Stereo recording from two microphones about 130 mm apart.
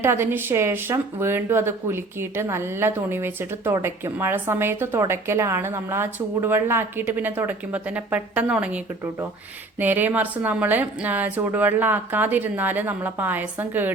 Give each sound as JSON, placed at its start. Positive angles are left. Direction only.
{"t": 0.0, "sound": "a woman's voice", "side_deg": -20}